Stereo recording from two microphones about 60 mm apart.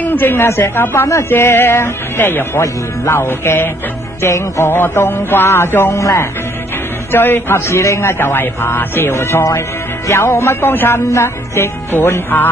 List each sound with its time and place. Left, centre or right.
0.0 s speech: left
2.6 s mantra: left
5.9 s speech: left
7.1 s speech: left
7.5 s speech: left
11.1 s mantra: left
11.9 s speech: left